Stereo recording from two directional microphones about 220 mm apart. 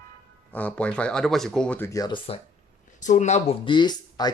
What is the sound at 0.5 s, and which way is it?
Speech, 5° left (ahead or behind).